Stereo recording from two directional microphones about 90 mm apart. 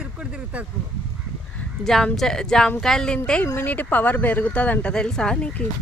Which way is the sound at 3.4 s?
25° left (ahead or behind).